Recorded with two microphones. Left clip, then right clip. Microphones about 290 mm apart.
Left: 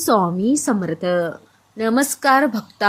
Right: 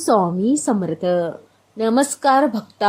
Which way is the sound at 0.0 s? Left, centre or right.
Centre.